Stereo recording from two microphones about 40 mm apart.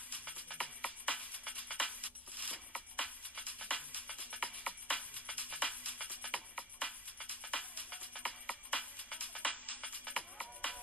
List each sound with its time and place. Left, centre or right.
0.1 s music: left